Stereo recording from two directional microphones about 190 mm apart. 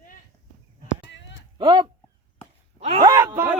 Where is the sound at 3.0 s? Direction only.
20° right (ahead or behind).